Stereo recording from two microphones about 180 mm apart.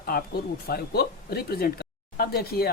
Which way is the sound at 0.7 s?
60° left (ahead or behind).